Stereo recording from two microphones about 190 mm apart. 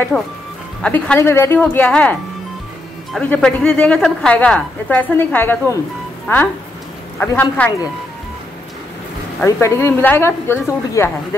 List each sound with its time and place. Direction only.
0.1 s speech: centre (ahead or behind)
9.4 s speech: 15° left (ahead or behind)